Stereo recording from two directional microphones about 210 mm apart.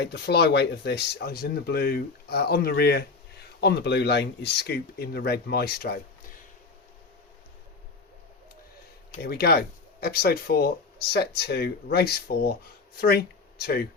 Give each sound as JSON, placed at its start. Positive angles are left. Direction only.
{"t": 0.0, "sound": "speech", "side_deg": 50}
{"t": 9.2, "sound": "speech", "side_deg": 50}